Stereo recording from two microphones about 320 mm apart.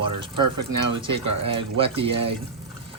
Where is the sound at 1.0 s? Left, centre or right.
Centre.